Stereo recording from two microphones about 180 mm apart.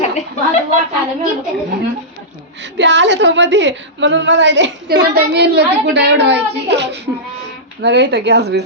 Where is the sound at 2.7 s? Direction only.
85° right.